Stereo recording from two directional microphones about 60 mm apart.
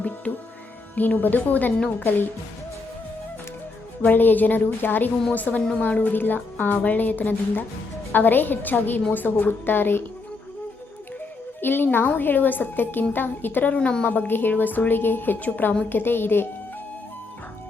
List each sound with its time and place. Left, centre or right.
0.9 s a woman's voice: left
4.1 s a woman's voice: left
11.6 s a woman's voice: left
13.7 s a woman's voice: centre; by 16.5 s left